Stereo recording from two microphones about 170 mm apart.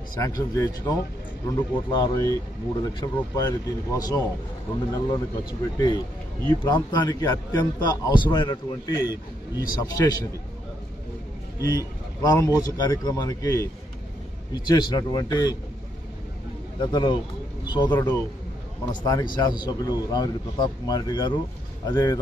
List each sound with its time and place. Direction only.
0.1 s a man's voice: 20° left (ahead or behind)
11.6 s a man's voice: 20° left (ahead or behind)
16.8 s a man's voice: 25° left (ahead or behind)